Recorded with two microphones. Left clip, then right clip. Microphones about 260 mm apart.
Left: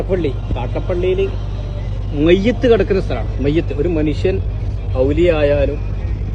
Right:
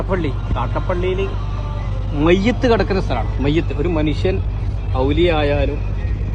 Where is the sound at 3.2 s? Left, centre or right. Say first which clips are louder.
Left 1 dB; right.